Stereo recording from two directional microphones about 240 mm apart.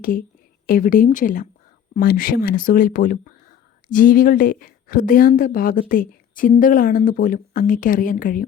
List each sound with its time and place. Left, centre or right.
0.0 s speech: left